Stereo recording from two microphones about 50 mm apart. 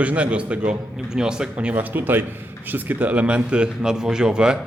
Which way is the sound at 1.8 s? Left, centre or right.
Right.